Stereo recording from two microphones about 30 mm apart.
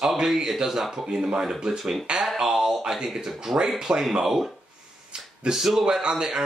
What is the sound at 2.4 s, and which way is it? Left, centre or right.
Speech, centre.